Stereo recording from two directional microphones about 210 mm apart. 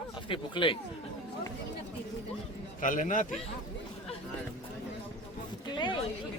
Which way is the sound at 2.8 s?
40° left (ahead or behind).